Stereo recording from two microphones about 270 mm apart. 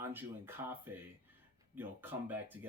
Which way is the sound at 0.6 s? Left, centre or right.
Right.